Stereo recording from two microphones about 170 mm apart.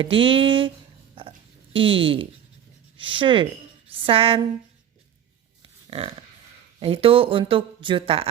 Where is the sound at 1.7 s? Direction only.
30° right (ahead or behind).